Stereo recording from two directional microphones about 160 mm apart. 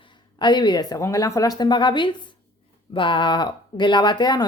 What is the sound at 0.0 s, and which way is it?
Speech, 30° left (ahead or behind).